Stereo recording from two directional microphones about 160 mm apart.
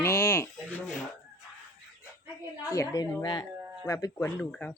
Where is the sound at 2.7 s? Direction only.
20° left (ahead or behind).